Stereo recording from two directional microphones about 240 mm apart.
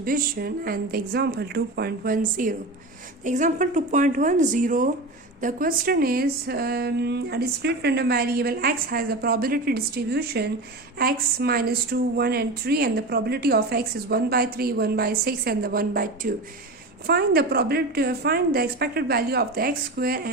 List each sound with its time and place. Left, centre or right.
0.0 s a woman's voice: right